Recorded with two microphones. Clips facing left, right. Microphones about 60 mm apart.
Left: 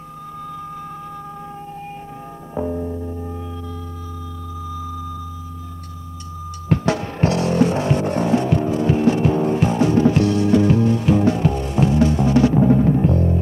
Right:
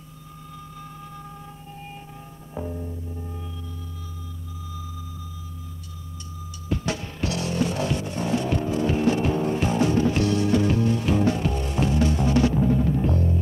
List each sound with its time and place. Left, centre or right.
2.5 s music: left
6.7 s music: left
7.2 s music: left
8.0 s vehicle: left
8.3 s vehicle: left
9.4 s music: left